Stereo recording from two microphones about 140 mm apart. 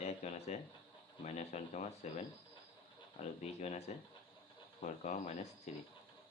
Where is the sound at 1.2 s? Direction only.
55° left (ahead or behind).